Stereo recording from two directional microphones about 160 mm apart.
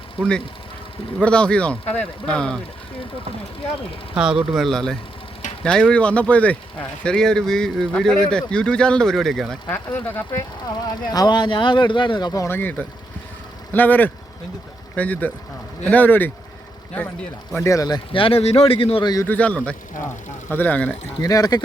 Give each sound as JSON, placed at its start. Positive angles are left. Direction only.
{"t": 0.2, "sound": "a man's voice", "side_deg": 5}
{"t": 4.1, "sound": "a man's voice", "side_deg": -5}
{"t": 10.8, "sound": "speech", "side_deg": 25}
{"t": 17.6, "sound": "speech", "side_deg": 20}
{"t": 19.1, "sound": "speech", "side_deg": 15}
{"t": 21.2, "sound": "speech", "side_deg": 25}